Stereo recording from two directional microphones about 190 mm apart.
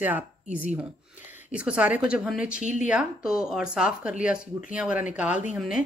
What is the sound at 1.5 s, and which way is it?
Speech, 5° right (ahead or behind).